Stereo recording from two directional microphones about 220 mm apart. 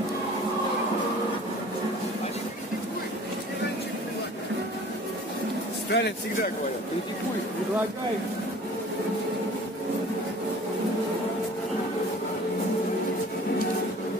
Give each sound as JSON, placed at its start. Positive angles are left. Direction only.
{"t": 5.9, "sound": "speech", "side_deg": 50}